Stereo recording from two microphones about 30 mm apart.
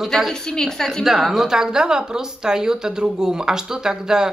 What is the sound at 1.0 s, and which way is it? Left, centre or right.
A woman's voice, centre.